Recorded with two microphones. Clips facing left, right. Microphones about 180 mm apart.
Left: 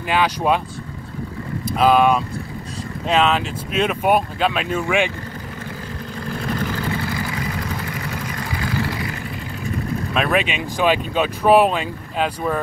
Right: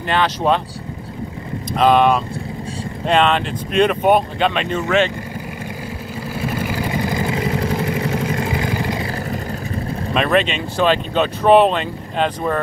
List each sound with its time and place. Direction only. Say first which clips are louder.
0.0 s speech: right 1 dB; 10° left (ahead or behind)
1.8 s speech: right 1 dB; 5° left (ahead or behind)
6.2 s vehicle: right 1 dB; 5° right (ahead or behind)
9.0 s vehicle: right 4 dB; 35° right (ahead or behind)
10.1 s speech: right 4 dB; 5° left (ahead or behind)